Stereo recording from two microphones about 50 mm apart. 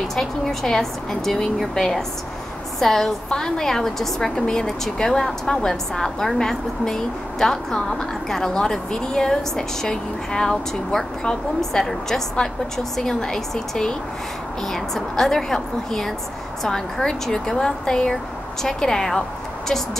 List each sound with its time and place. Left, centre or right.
0.1 s a woman's voice: centre